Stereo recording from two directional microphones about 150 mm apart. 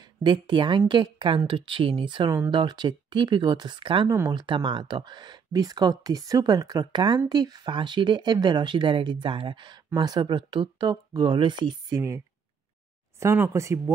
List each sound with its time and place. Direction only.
0.2 s speech: 30° right (ahead or behind)
13.2 s speech: 20° right (ahead or behind)